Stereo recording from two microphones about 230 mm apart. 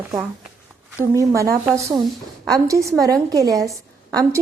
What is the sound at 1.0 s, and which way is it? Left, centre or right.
A woman's voice, centre.